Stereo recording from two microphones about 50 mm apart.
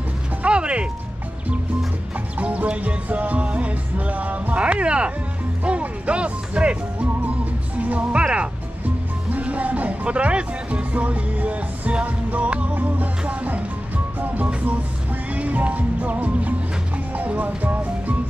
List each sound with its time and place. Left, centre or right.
0.4 s mechanisms: right
2.3 s music: right
17.6 s music: right